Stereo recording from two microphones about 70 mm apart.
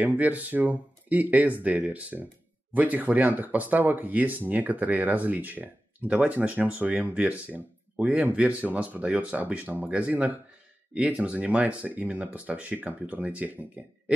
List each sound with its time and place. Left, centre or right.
0.0 s speech: right